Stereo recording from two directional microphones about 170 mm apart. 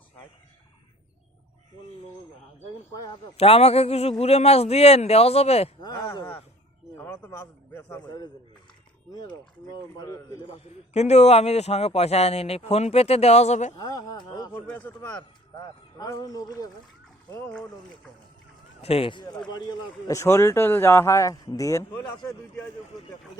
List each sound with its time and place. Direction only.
2.9 s speech: 20° left (ahead or behind)
3.3 s a man's voice: 35° left (ahead or behind)
5.8 s speech: 25° left (ahead or behind)
6.9 s speech: 15° left (ahead or behind)
8.0 s speech: 25° left (ahead or behind)
10.5 s a man's voice: 40° left (ahead or behind)
13.7 s speech: 20° left (ahead or behind)
14.7 s speech: 10° left (ahead or behind)
15.5 s speech: 20° left (ahead or behind)
18.8 s a man's voice: 35° left (ahead or behind); by 22.1 s 20° left (ahead or behind)